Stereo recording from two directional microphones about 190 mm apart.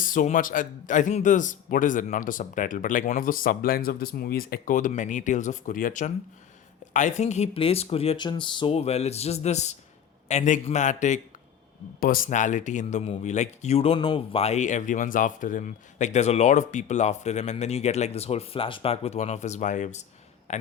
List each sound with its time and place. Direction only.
0.0 s a man's voice: 45° left (ahead or behind)